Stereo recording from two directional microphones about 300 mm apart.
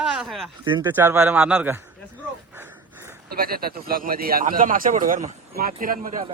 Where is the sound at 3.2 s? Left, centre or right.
Right.